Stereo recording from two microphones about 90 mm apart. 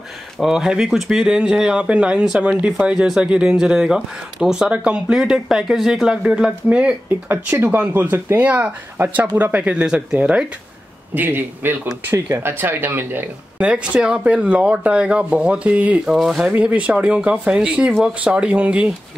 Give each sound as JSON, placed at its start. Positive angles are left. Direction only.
{"t": 0.4, "sound": "speech", "side_deg": -5}
{"t": 7.4, "sound": "speech", "side_deg": -20}
{"t": 16.2, "sound": "speech", "side_deg": -5}